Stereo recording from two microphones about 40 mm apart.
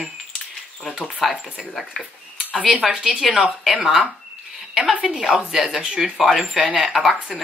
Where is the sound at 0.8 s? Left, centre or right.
Centre.